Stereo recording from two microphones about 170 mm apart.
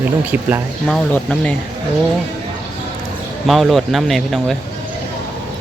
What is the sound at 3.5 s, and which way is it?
Speech, centre (ahead or behind).